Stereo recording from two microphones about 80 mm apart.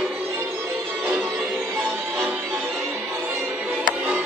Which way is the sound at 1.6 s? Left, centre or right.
Right.